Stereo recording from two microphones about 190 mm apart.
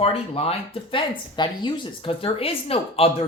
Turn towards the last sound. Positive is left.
turn(degrees=30)  # may be behind; listen again after turning